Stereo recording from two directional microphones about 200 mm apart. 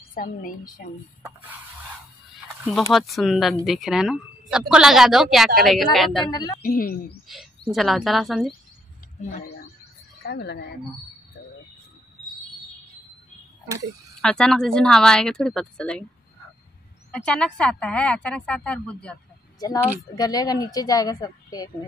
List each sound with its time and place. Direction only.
0.1 s a woman's voice: 45° left (ahead or behind)
2.9 s speech: centre (ahead or behind)
6.3 s speech: 20° left (ahead or behind)
6.6 s a woman's voice: 45° left (ahead or behind)
7.3 s speech: centre (ahead or behind)
9.2 s a woman's voice: 45° left (ahead or behind)
10.2 s speech: 55° left (ahead or behind)
14.2 s speech: 5° left (ahead or behind)
17.1 s speech: 5° left (ahead or behind)
19.6 s speech: 20° left (ahead or behind)